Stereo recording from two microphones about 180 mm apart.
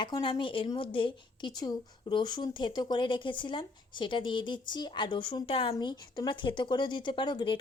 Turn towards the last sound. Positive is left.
turn(degrees=25)  # may be behind; listen again after turning